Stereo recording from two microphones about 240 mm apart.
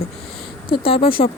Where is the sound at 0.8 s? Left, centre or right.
Left.